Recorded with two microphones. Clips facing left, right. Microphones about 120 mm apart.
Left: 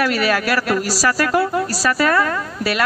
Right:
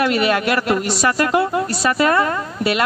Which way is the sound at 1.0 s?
20° right (ahead or behind).